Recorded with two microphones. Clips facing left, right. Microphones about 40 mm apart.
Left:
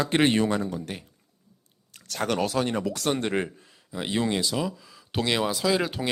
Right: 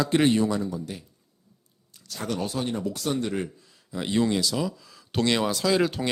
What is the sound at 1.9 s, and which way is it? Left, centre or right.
Speech, left.